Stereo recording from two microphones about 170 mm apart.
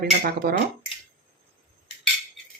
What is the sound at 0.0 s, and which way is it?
Speech, 60° right (ahead or behind).